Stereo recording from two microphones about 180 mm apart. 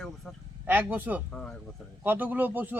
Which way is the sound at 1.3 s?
5° left (ahead or behind).